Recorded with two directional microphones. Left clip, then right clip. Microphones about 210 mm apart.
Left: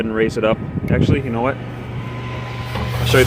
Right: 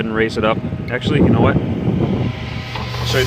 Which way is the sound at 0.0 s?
5° right (ahead or behind).